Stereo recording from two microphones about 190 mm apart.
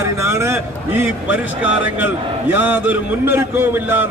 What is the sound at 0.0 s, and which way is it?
A man's voice, 15° right (ahead or behind).